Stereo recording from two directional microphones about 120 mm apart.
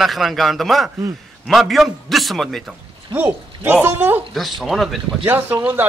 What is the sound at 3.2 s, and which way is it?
Speech, 15° right (ahead or behind).